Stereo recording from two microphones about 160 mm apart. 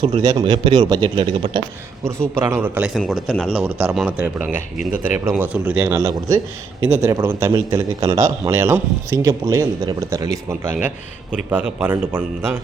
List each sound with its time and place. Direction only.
0.0 s speech: 30° right (ahead or behind)
2.2 s a man's voice: 15° right (ahead or behind)